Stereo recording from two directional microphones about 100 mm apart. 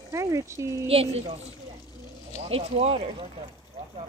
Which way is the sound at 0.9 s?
85° right.